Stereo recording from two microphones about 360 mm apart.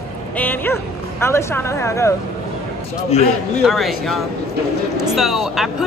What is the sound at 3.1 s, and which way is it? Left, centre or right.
Speech, centre.